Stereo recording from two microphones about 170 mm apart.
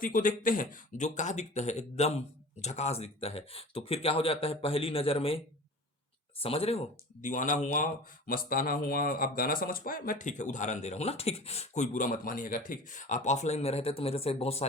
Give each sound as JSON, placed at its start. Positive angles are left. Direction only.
{"t": 0.0, "sound": "speech", "side_deg": 55}
{"t": 6.4, "sound": "speech", "side_deg": 35}